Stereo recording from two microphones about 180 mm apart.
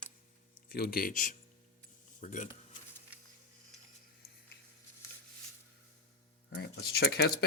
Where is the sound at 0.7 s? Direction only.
55° left (ahead or behind).